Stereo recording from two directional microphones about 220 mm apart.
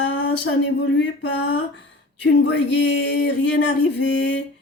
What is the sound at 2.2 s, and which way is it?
A woman's voice, 55° left (ahead or behind).